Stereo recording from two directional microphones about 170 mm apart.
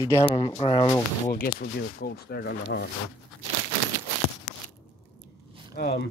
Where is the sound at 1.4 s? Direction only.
65° left (ahead or behind).